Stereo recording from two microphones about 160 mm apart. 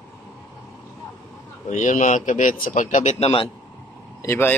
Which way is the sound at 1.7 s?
50° left (ahead or behind).